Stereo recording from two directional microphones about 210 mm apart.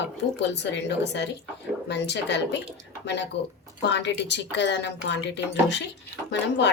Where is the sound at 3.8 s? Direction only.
55° left (ahead or behind).